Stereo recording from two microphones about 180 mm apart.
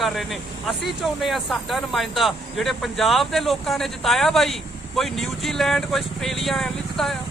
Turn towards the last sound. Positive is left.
turn(degrees=0)  # may be behind; listen again after turning